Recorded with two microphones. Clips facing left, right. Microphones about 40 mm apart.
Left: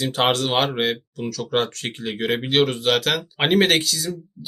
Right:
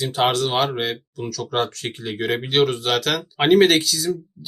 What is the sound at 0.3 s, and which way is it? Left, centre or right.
Speech, left.